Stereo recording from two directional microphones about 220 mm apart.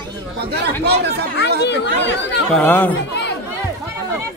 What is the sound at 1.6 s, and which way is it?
Speech, 50° left (ahead or behind).